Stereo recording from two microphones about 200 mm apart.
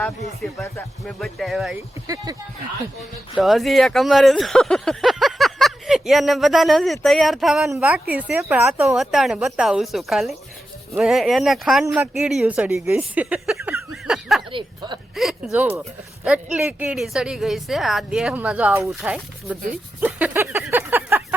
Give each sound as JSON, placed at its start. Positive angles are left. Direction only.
{"t": 0.4, "sound": "speech", "side_deg": 5}
{"t": 3.3, "sound": "speech", "side_deg": 0}
{"t": 13.9, "sound": "snicker", "side_deg": 0}
{"t": 14.5, "sound": "a sound", "side_deg": -20}
{"t": 15.1, "sound": "speech", "side_deg": 0}
{"t": 20.0, "sound": "a sound", "side_deg": -5}